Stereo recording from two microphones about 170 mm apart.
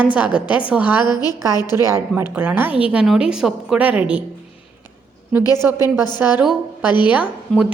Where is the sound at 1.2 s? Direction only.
20° left (ahead or behind).